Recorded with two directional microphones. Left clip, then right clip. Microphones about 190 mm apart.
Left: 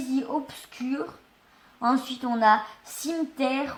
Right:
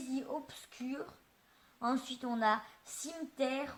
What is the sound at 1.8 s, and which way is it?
Speech, 45° right (ahead or behind).